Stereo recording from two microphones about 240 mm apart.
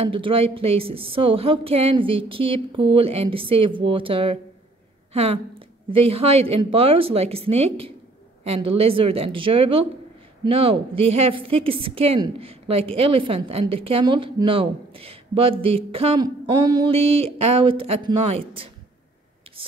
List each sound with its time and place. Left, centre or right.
0.0 s a woman's voice: right
5.9 s a woman's voice: right